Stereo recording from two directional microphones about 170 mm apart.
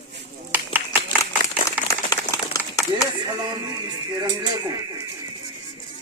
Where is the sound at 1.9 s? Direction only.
20° left (ahead or behind).